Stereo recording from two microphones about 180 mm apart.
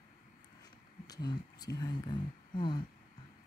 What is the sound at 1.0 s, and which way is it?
Speech, 20° left (ahead or behind).